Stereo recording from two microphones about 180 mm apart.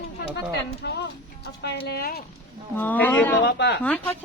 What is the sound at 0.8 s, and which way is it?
Speech, 65° left (ahead or behind).